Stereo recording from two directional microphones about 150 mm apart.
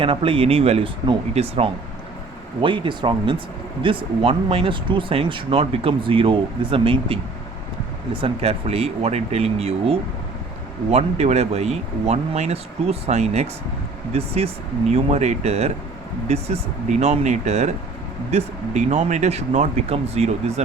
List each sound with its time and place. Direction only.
0.0 s speech: 35° right (ahead or behind)